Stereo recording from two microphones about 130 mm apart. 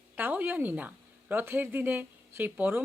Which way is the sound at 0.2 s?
15° right (ahead or behind).